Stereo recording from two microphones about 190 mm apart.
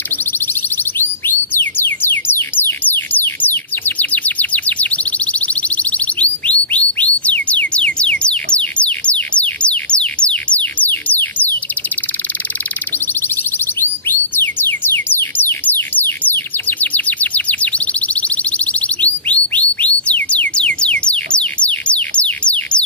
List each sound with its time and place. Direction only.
1.5 s music: 10° left (ahead or behind)
14.3 s music: 10° left (ahead or behind)